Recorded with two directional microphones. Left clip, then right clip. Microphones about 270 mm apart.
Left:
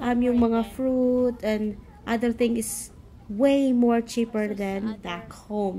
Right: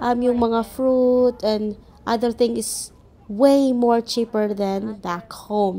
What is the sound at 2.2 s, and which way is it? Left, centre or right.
A woman's voice, centre.